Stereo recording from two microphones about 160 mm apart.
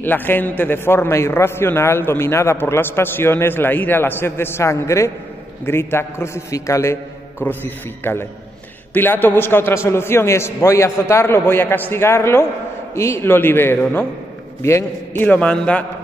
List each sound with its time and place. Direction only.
0.0 s a man's voice: 10° left (ahead or behind)